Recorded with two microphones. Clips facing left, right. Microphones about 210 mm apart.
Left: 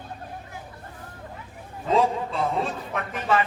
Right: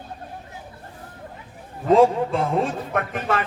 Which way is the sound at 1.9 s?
50° right (ahead or behind).